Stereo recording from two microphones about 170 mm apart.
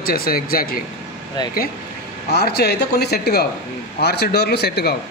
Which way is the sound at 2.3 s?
70° left (ahead or behind).